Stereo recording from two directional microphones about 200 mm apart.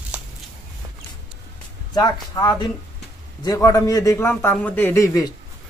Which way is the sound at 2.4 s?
15° left (ahead or behind).